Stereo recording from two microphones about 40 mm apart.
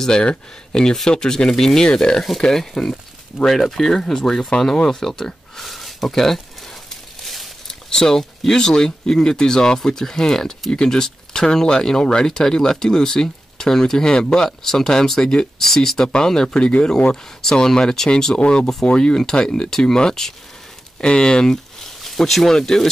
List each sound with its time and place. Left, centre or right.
0.2 s speech: left
7.6 s speech: centre
22.0 s speech: centre